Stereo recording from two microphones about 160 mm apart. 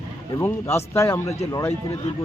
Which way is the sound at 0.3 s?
15° left (ahead or behind).